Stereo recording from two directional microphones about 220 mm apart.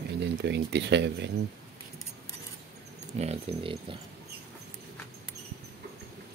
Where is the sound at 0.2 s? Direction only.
50° right (ahead or behind).